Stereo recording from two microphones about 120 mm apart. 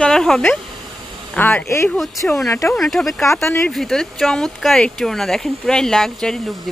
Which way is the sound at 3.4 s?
20° left (ahead or behind).